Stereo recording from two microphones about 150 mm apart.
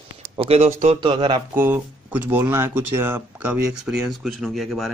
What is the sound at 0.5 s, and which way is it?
Speech, 45° right (ahead or behind).